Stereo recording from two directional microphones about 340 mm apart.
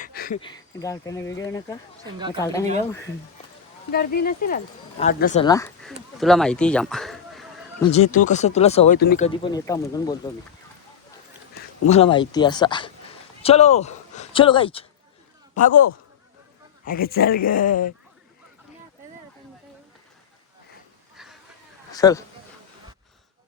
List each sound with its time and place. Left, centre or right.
0.0 s cricket: left
0.4 s speech: centre
2.1 s speech: centre
2.4 s speech: centre
3.9 s speech: left; by 7.4 s centre
7.8 s speech: centre
11.9 s a man's voice: centre
16.8 s speech: left
21.9 s a man's voice: centre